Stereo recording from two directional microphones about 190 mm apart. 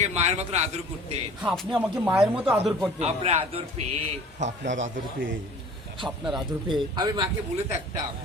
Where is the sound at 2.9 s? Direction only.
35° right (ahead or behind).